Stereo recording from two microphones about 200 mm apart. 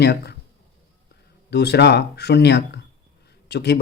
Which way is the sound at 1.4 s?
55° left (ahead or behind).